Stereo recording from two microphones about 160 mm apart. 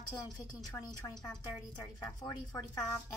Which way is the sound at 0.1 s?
20° left (ahead or behind).